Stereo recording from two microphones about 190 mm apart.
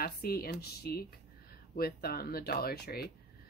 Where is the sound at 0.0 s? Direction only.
55° left (ahead or behind).